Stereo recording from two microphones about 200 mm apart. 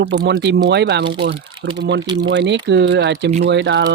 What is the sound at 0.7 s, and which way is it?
Speech, 60° right (ahead or behind).